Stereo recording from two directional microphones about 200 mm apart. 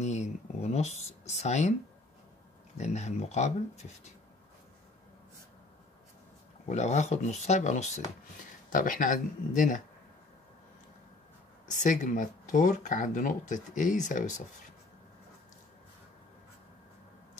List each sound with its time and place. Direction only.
0.0 s speech: 35° left (ahead or behind)
2.8 s speech: 35° left (ahead or behind)
6.7 s speech: 35° left (ahead or behind)
11.7 s speech: 40° left (ahead or behind)